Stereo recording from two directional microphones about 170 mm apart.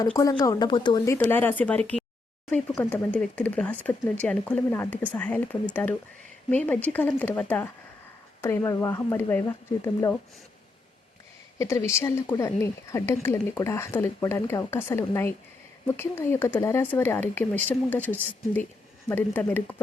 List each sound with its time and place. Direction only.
0.2 s a woman's voice: 20° left (ahead or behind)
11.9 s a woman's voice: 15° left (ahead or behind)